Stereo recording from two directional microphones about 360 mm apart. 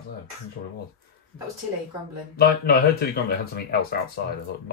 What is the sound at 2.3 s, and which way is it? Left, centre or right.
Speech, left.